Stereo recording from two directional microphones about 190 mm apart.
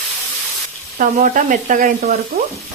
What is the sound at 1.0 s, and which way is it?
Speech, 45° right (ahead or behind).